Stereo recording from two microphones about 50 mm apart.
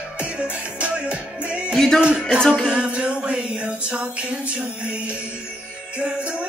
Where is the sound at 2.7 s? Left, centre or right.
Right.